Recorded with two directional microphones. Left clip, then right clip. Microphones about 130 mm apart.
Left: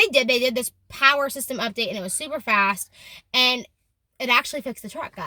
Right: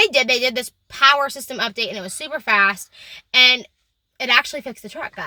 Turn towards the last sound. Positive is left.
turn(degrees=20)  # may be behind; listen again after turning